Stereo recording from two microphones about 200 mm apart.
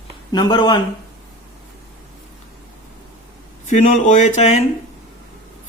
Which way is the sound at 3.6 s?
35° left (ahead or behind).